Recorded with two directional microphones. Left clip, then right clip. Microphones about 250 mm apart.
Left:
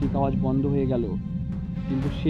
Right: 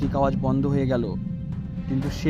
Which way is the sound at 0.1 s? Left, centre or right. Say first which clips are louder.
Right 3 dB; right.